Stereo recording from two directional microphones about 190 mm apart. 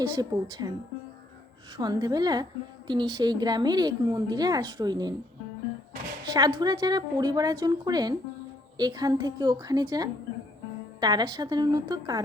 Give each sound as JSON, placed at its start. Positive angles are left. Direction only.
{"t": 0.0, "sound": "a woman's voice", "side_deg": -20}
{"t": 1.7, "sound": "a woman's voice", "side_deg": -20}
{"t": 6.2, "sound": "a woman's voice", "side_deg": -20}